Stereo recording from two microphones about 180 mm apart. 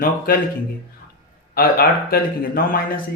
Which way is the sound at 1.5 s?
55° left (ahead or behind).